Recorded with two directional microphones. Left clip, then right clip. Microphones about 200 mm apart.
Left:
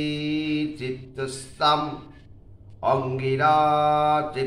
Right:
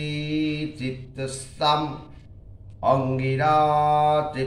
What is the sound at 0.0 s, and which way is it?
Music, 15° left (ahead or behind).